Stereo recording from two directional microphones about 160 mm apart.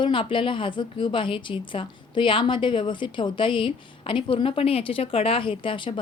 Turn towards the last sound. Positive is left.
turn(degrees=30)  # may be behind; listen again after turning